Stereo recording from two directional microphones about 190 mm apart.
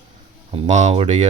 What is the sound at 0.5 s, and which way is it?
Speech, 35° right (ahead or behind).